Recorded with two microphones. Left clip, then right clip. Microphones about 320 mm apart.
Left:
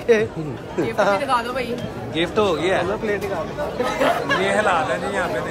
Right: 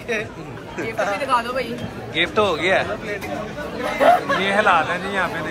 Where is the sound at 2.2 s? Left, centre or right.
Centre.